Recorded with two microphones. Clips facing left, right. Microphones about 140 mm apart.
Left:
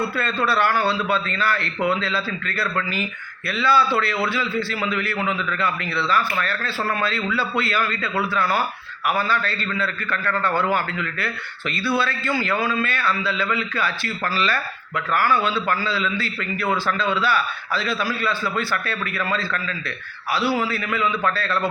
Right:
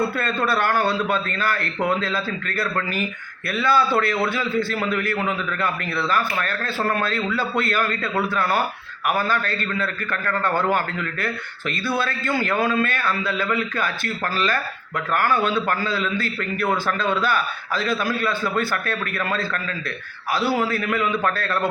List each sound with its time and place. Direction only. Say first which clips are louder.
0.2 s a man's voice: left 1 dB; 50° right (ahead or behind)